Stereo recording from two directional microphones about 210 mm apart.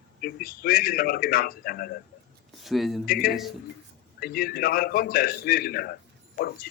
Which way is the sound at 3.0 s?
45° left (ahead or behind).